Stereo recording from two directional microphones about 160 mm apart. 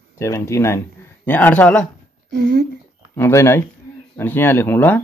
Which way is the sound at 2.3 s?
90° right.